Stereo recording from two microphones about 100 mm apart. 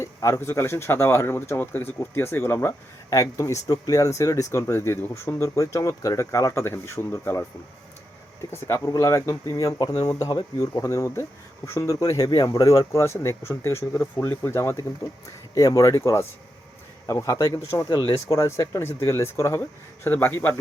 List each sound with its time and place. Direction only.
0.0 s speech: 30° left (ahead or behind)